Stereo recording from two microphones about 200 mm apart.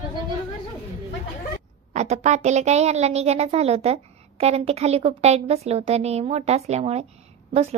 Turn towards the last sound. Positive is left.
turn(degrees=-30)  # may be behind; listen again after turning